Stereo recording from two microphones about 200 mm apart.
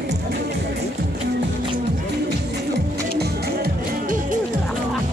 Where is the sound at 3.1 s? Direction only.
45° right (ahead or behind).